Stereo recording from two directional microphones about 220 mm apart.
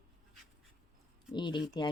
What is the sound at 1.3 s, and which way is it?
Speech, 20° left (ahead or behind).